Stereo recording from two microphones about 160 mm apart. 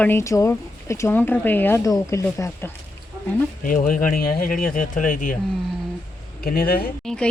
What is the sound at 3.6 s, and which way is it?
Speech, 55° left (ahead or behind).